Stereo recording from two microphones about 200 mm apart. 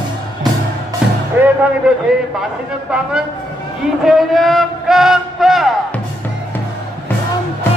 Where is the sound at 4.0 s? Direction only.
Centre (ahead or behind).